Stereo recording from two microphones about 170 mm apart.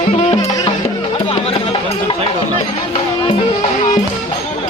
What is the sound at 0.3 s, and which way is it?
Music, 25° left (ahead or behind).